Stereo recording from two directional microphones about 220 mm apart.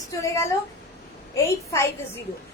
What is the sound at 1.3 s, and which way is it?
Speech, 10° left (ahead or behind).